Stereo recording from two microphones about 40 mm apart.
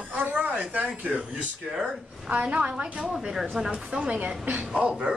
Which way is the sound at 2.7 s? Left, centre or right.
Centre.